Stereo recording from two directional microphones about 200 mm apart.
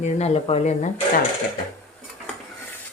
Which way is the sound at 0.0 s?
35° left (ahead or behind).